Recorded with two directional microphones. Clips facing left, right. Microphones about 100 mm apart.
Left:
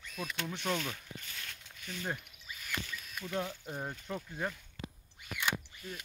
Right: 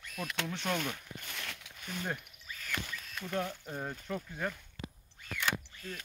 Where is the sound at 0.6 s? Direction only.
50° right (ahead or behind); by 1.7 s 70° right (ahead or behind).